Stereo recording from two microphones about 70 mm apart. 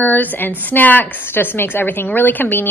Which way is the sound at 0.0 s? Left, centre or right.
Left.